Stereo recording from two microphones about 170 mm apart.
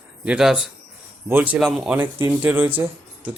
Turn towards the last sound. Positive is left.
turn(degrees=-10)  # may be behind; listen again after turning